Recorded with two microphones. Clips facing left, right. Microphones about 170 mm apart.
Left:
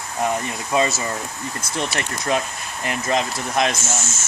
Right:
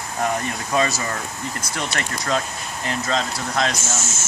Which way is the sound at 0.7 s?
20° left (ahead or behind).